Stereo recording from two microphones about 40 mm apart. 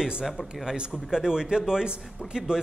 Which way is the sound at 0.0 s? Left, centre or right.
Centre.